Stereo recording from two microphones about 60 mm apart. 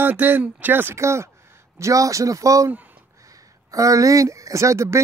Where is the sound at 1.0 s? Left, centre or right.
Right.